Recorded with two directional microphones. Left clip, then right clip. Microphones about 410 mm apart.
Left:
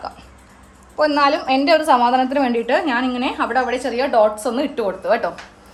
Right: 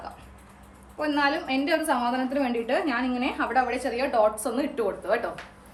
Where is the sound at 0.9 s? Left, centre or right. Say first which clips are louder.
Left 9 dB; centre.